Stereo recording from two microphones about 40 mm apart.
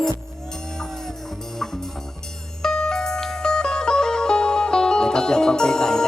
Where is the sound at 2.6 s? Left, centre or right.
Centre.